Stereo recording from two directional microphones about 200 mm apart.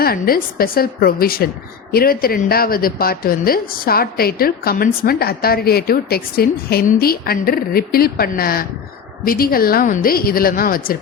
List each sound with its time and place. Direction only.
0.0 s a woman's voice: 50° left (ahead or behind)